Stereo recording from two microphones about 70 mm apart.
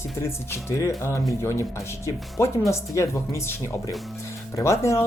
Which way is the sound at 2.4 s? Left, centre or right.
Left.